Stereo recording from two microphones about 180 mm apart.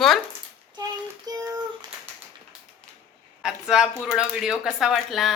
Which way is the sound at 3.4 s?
5° right (ahead or behind).